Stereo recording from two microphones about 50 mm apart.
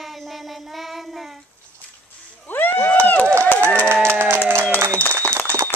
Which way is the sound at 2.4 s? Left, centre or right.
Left.